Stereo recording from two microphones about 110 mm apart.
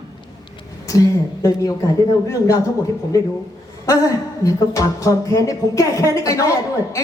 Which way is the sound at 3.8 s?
30° left (ahead or behind).